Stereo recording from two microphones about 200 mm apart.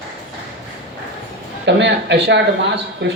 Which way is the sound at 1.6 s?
60° right (ahead or behind).